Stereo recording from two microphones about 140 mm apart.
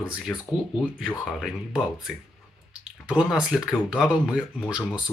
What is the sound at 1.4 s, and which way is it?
Speech, 5° right (ahead or behind).